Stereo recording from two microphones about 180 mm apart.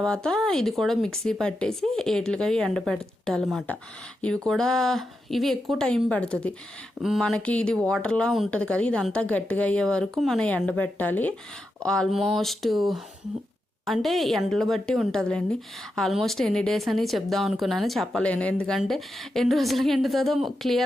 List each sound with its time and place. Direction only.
0.0 s speech: 5° left (ahead or behind)